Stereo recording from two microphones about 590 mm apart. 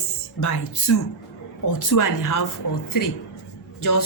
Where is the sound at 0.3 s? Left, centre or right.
Left.